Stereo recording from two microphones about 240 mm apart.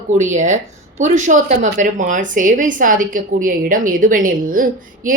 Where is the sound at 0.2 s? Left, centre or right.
Right.